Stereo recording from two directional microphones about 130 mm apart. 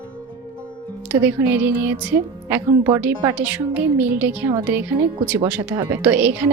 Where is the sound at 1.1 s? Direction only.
10° right (ahead or behind).